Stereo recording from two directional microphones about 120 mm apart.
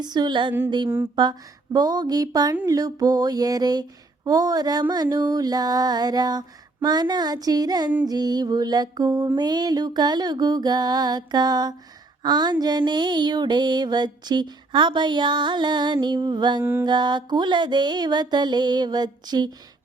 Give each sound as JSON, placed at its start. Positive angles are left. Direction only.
{"t": 0.0, "sound": "mantra", "side_deg": -35}